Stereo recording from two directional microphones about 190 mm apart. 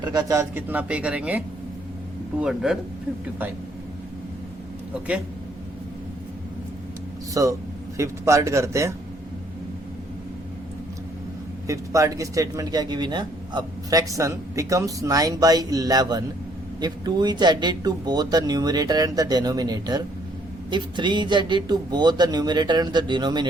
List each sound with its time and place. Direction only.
0.0 s speech: 20° right (ahead or behind); by 2.7 s 5° right (ahead or behind)
7.4 s speech: 15° right (ahead or behind)
11.7 s speech: 15° right (ahead or behind)